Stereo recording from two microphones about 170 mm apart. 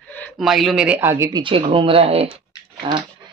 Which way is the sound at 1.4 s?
30° right (ahead or behind).